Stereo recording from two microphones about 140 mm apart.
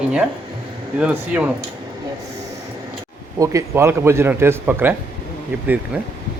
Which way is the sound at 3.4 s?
20° right (ahead or behind).